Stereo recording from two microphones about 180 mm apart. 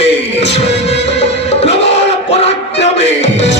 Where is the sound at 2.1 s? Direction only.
35° left (ahead or behind).